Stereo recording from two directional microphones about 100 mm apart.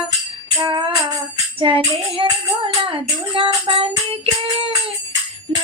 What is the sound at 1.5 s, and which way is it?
Music, 65° right (ahead or behind).